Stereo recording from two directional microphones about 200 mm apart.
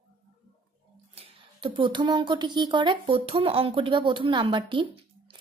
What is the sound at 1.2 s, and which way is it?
Speech, 25° right (ahead or behind).